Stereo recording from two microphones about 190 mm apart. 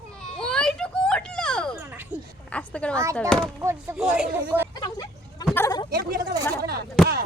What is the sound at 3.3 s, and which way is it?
Speech, 5° left (ahead or behind).